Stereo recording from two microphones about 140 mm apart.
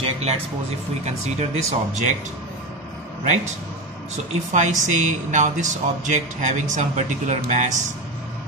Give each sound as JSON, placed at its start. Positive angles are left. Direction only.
{"t": 0.0, "sound": "a sound", "side_deg": -50}
{"t": 1.0, "sound": "speech", "side_deg": -50}
{"t": 4.5, "sound": "speech", "side_deg": -60}